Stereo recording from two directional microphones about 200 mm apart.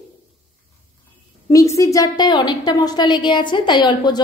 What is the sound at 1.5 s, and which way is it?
A woman's voice, 15° left (ahead or behind).